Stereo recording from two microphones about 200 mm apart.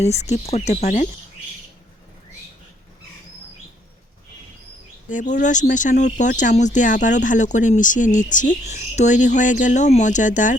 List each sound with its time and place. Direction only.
0.0 s speech: 35° left (ahead or behind)
5.0 s speech: 40° left (ahead or behind)